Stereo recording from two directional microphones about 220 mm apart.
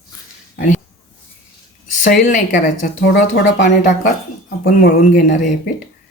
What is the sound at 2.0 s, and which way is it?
Speech, 35° left (ahead or behind).